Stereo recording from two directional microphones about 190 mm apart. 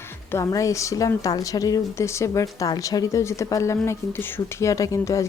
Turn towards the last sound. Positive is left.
turn(degrees=15)  # may be behind; listen again after turning